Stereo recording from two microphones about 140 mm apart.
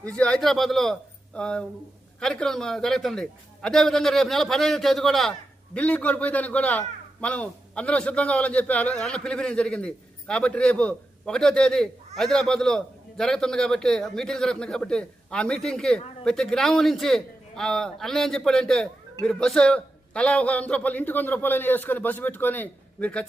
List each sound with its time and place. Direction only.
0.2 s a man's voice: 5° left (ahead or behind)